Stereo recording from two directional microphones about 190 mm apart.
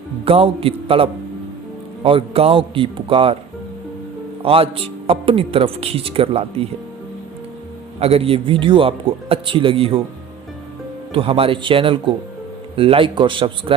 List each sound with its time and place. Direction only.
0.3 s a man's voice: 30° right (ahead or behind)
4.4 s a man's voice: 30° right (ahead or behind)
7.9 s a man's voice: 30° right (ahead or behind)
11.1 s a man's voice: 30° right (ahead or behind)